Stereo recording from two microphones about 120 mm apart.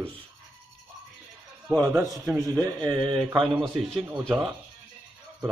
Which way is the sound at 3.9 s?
5° left (ahead or behind).